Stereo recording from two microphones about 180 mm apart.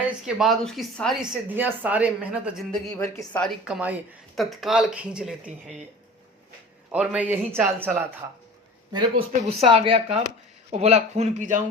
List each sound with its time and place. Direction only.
0.3 s speech: centre (ahead or behind)
1.5 s speech: 10° right (ahead or behind)
3.0 s a woman's voice: 20° left (ahead or behind)
3.4 s speech: 5° right (ahead or behind)
6.9 s speech: 5° right (ahead or behind)
8.9 s speech: 30° right (ahead or behind); by 11.6 s 45° right (ahead or behind)